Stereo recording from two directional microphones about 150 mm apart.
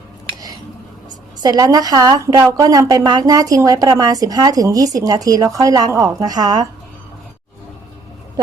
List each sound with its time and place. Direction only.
1.4 s a woman's voice: 25° right (ahead or behind)